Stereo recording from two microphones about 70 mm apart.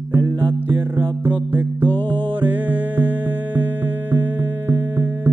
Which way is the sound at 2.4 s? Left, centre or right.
Right.